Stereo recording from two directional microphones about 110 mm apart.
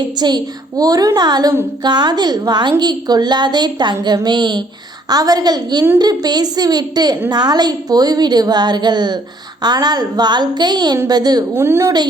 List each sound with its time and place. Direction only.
0.2 s a woman's voice: 40° right (ahead or behind)
11.5 s a woman's voice: 20° right (ahead or behind)